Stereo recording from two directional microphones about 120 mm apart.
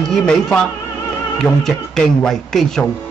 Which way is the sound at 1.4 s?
5° left (ahead or behind).